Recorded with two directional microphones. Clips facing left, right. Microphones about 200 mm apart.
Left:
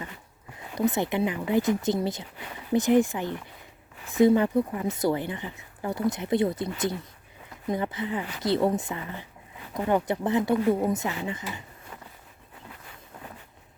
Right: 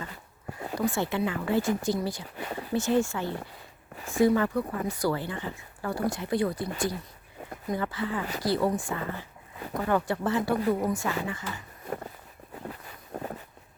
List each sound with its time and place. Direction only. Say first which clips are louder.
0.8 s speech: left 3 dB; 20° left (ahead or behind)